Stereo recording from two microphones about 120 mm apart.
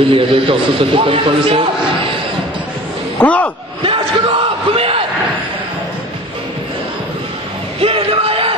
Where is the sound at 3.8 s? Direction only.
45° right (ahead or behind).